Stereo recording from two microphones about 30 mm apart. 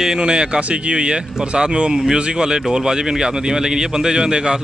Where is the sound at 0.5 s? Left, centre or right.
Right.